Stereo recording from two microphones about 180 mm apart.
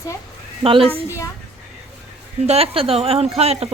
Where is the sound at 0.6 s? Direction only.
30° right (ahead or behind).